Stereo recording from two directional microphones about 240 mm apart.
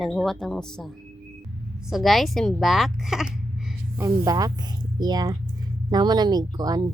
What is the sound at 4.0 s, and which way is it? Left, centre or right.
Speech, centre.